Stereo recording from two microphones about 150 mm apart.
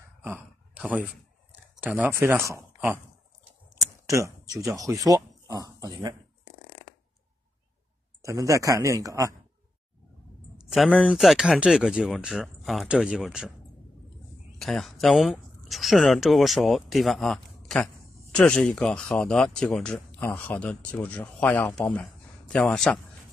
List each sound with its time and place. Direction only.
0.2 s a sound: 10° right (ahead or behind)
1.8 s speech: 10° right (ahead or behind)
3.7 s a sound: 20° right (ahead or behind)
4.8 s a man's voice: 25° right (ahead or behind)
8.3 s a man's voice: 20° right (ahead or behind)
10.7 s speech: centre (ahead or behind)
14.6 s speech: centre (ahead or behind)